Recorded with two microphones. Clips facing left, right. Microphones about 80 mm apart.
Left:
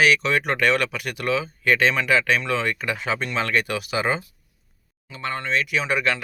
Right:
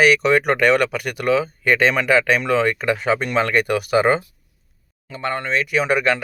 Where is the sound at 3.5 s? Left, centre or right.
Right.